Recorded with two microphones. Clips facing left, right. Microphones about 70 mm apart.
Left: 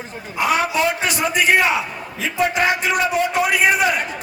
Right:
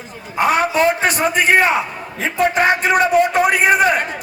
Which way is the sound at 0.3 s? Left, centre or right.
Right.